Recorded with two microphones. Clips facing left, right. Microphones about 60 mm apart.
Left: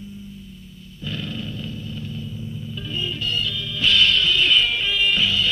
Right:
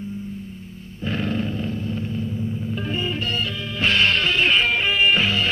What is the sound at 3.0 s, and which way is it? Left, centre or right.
Music, right.